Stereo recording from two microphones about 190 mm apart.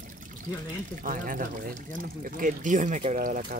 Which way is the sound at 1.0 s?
45° right (ahead or behind).